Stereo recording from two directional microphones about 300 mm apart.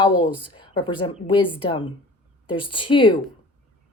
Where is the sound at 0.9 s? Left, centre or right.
Centre.